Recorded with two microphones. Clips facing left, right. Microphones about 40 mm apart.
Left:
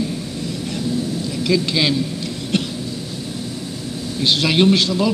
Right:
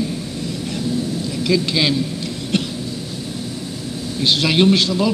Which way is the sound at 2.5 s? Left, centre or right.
Centre.